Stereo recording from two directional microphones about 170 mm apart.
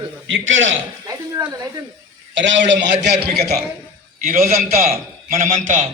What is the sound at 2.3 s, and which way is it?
A man's voice, 90° right.